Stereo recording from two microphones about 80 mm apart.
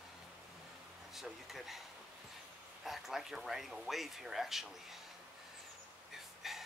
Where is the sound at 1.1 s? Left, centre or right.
Centre.